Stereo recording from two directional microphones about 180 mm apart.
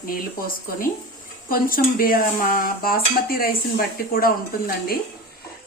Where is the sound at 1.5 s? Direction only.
55° left (ahead or behind).